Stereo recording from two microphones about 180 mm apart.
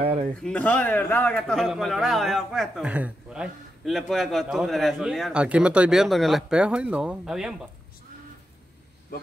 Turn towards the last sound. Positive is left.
turn(degrees=-5)  # may be behind; listen again after turning